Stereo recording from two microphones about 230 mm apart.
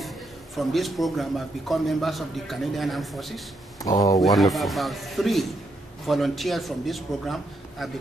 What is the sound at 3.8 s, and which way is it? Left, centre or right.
Speech, centre.